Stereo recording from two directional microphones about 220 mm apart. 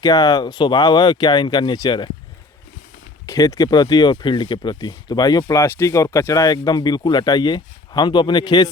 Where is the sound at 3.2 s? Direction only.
15° left (ahead or behind).